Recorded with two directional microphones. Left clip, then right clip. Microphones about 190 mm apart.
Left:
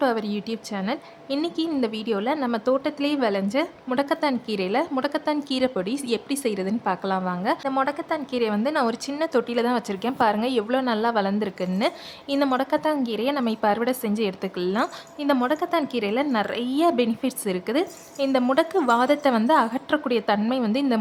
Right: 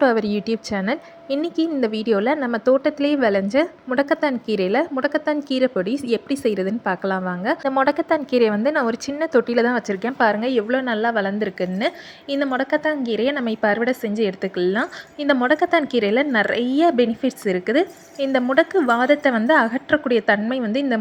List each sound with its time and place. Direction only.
0.0 s a woman's voice: 20° right (ahead or behind)